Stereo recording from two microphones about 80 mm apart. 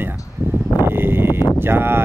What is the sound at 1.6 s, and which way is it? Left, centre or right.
Speech, right.